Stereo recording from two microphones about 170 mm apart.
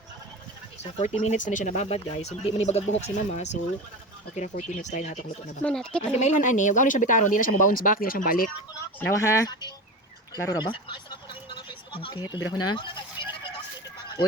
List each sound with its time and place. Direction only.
0.8 s speech: 40° left (ahead or behind)
5.6 s speech: 5° left (ahead or behind)
6.1 s speech: 45° left (ahead or behind)
9.0 s speech: 15° left (ahead or behind)